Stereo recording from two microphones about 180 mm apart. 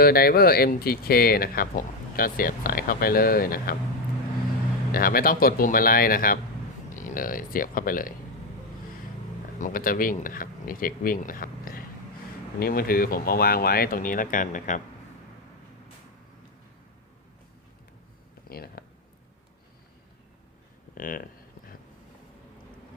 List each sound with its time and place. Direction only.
0.0 s speech: 55° left (ahead or behind)
4.9 s speech: 50° left (ahead or behind)
9.6 s speech: 50° left (ahead or behind)
18.4 s a sound: 55° left (ahead or behind)
20.9 s speech: 50° left (ahead or behind)